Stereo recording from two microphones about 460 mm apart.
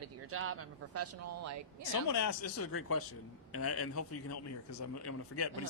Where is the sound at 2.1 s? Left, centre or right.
Left.